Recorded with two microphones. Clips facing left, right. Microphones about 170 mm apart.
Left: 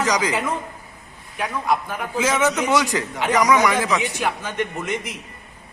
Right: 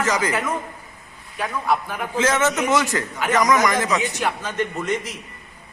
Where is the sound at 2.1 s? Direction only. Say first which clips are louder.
Even; 10° left (ahead or behind).